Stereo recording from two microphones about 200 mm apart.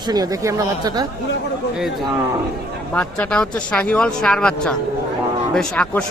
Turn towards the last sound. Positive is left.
turn(degrees=5)  # may be behind; listen again after turning